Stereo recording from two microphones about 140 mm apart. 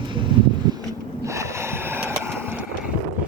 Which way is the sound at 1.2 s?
20° right (ahead or behind).